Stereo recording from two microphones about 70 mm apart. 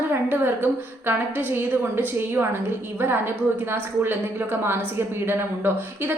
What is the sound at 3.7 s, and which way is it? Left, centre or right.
A woman's voice, right.